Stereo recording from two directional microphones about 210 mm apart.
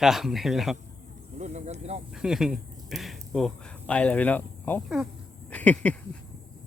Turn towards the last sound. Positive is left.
turn(degrees=5)  # may be behind; listen again after turning